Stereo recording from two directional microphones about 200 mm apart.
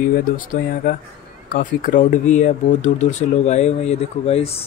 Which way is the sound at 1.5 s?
45° left (ahead or behind).